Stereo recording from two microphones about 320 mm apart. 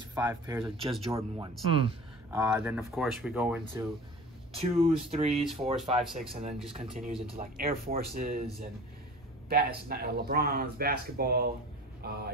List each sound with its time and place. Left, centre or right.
0.1 s speech: centre
4.6 s speech: centre
5.3 s speech: centre
6.7 s speech: centre
9.5 s speech: right